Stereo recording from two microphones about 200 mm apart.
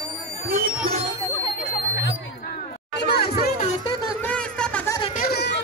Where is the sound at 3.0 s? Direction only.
50° left (ahead or behind).